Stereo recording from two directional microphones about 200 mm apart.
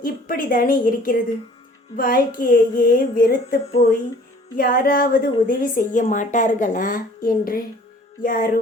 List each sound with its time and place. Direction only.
0.0 s a woman's voice: 45° left (ahead or behind)